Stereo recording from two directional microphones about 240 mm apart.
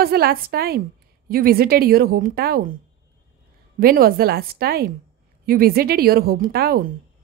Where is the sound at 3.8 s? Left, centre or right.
Right.